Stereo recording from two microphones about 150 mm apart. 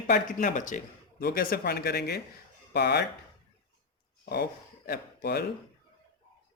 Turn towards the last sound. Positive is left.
turn(degrees=90)